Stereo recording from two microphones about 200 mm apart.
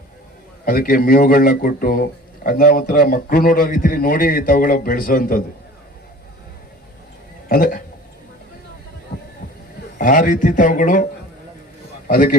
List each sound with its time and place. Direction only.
0.6 s speech: 45° left (ahead or behind)
7.4 s speech: 45° left (ahead or behind)
10.0 s a man's voice: 40° left (ahead or behind)